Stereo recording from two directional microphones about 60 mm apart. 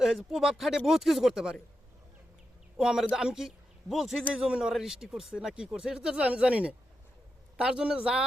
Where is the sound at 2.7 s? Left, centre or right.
Centre.